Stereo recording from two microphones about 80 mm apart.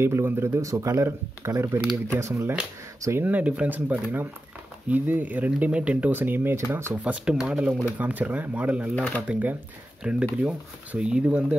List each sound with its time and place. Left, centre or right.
0.0 s speech: right
3.3 s speech: centre
7.2 s speech: centre
8.9 s speech: centre
9.3 s speech: centre